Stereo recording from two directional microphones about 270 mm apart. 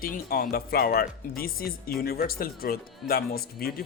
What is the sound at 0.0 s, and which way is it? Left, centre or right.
Speech, left.